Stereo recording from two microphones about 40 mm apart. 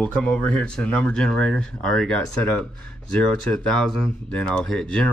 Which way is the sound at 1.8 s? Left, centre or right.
Centre.